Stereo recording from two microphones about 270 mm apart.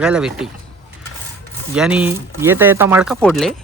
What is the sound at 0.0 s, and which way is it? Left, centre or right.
Speech, centre.